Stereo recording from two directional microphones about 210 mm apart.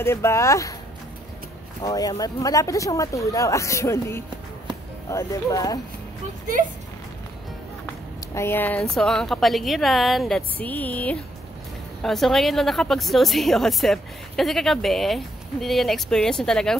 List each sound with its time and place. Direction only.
0.0 s speech: 10° left (ahead or behind)
1.8 s speech: 15° left (ahead or behind)
8.4 s a woman's voice: 10° left (ahead or behind)